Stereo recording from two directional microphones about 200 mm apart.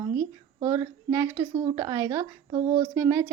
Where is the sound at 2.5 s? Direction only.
30° right (ahead or behind).